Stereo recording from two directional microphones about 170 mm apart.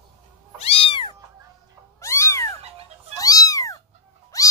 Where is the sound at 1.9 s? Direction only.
15° left (ahead or behind).